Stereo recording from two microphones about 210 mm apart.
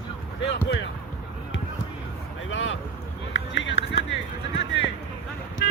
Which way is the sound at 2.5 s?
65° left (ahead or behind).